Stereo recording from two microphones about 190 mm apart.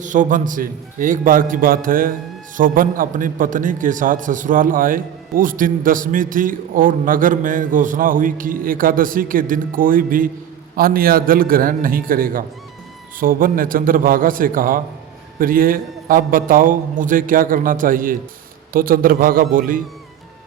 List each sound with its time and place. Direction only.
0.0 s a man's voice: 45° right (ahead or behind)